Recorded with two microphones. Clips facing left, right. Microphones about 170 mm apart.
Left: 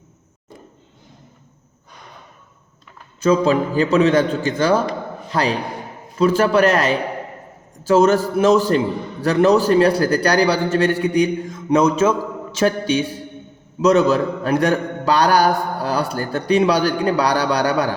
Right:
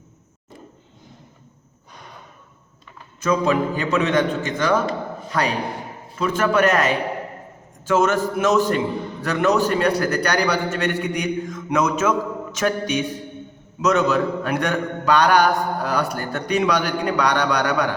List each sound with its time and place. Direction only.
3.2 s a man's voice: 30° left (ahead or behind)